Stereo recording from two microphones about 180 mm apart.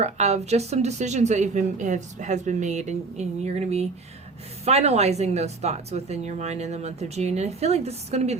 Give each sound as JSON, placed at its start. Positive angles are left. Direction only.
{"t": 0.0, "sound": "speech", "side_deg": -35}